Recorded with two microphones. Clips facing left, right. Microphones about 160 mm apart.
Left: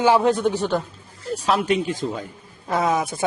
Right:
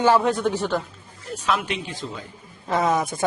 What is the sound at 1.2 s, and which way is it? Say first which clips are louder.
Speech: left 5 dB; 35° left (ahead or behind).